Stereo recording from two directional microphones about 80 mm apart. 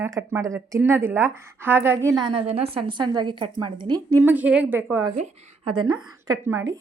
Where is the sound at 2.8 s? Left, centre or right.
Right.